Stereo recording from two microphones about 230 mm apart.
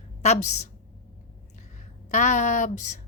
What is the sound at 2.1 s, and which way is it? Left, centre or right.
Speech, left.